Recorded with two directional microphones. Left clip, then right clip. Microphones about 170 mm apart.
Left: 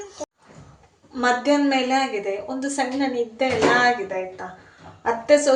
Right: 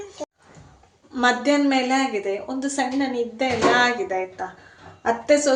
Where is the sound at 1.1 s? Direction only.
15° right (ahead or behind).